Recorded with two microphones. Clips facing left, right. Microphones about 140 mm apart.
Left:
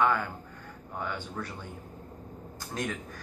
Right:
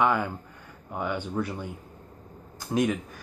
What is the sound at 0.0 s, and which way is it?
Speech, 15° right (ahead or behind).